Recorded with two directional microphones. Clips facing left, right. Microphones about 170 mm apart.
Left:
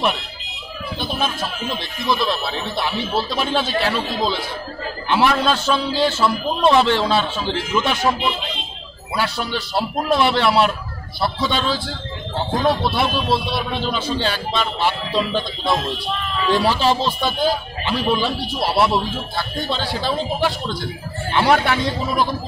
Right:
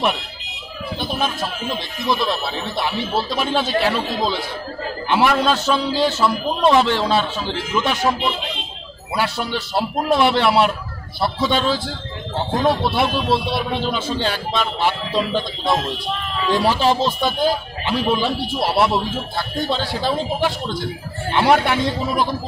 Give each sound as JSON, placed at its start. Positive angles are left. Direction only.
{"t": 2.0, "sound": "a man's voice", "side_deg": -20}
{"t": 5.1, "sound": "a man's voice", "side_deg": -10}
{"t": 20.0, "sound": "a man's voice", "side_deg": -15}